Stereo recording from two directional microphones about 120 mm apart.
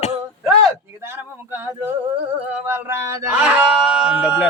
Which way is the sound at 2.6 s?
15° right (ahead or behind).